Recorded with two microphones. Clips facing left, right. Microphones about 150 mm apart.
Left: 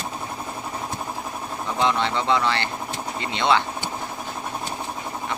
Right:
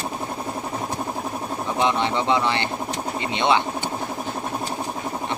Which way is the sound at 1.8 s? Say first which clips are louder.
Right 1 dB; 20° right (ahead or behind).